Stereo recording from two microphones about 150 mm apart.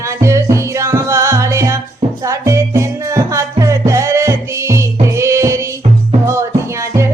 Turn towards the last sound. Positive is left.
turn(degrees=-20)  # may be behind; listen again after turning